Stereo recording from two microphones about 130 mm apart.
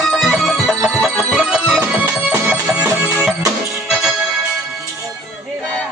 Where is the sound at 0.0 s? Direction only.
Centre (ahead or behind).